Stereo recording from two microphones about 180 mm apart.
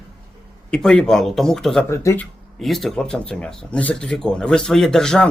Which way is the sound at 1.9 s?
15° left (ahead or behind).